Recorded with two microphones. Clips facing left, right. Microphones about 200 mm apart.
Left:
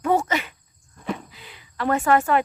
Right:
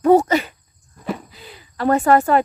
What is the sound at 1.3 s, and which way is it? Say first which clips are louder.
Speech: right 3 dB; 35° right (ahead or behind).